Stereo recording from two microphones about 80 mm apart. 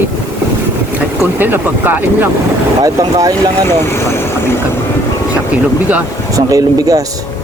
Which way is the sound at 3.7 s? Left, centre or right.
Left.